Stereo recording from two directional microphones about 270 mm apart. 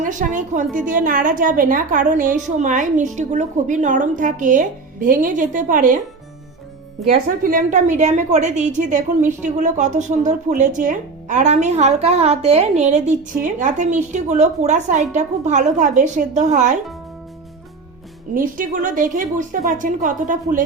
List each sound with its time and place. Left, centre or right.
0.0 s a woman's voice: right
7.1 s a woman's voice: right
18.3 s a woman's voice: right